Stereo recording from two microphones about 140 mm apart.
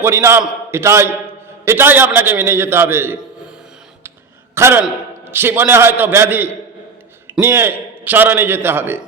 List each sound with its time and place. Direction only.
0.0 s a man's voice: 20° right (ahead or behind)
4.5 s a man's voice: 20° right (ahead or behind)